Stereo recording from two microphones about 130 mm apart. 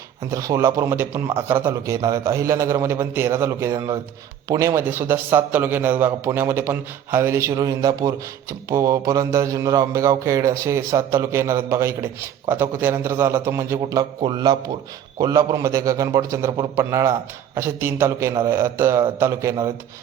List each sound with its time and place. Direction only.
0.3 s a man's voice: 25° right (ahead or behind)